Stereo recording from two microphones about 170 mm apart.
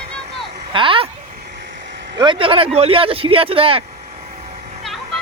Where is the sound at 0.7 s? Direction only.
30° right (ahead or behind).